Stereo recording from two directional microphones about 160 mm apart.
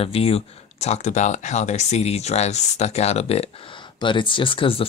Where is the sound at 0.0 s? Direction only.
35° left (ahead or behind).